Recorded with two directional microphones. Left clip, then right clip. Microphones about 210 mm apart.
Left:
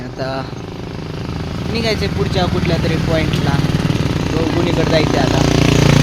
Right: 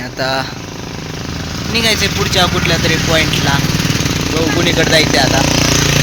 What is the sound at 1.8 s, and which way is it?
Speech, centre (ahead or behind).